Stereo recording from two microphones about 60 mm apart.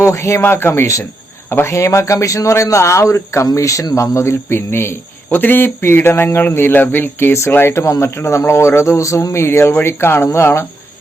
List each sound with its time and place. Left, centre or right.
0.0 s a man's voice: left
4.4 s speech: left
5.3 s speech: left